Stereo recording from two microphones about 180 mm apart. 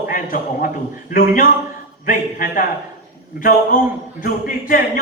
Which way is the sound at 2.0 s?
50° left (ahead or behind).